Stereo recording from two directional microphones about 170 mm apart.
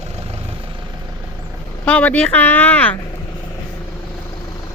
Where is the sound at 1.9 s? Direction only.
10° left (ahead or behind).